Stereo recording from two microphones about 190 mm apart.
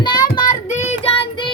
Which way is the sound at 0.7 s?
35° left (ahead or behind).